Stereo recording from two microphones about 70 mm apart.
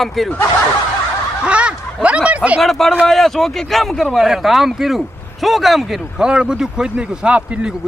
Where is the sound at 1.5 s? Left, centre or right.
Centre.